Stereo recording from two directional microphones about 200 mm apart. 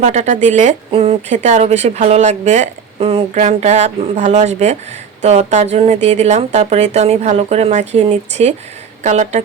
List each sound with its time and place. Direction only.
0.0 s speech: 35° right (ahead or behind)